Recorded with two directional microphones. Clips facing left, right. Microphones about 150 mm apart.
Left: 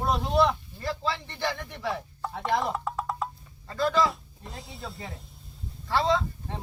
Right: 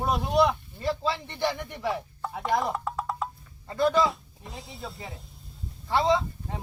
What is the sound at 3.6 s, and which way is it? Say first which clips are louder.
Speech: right 3 dB; 20° right (ahead or behind).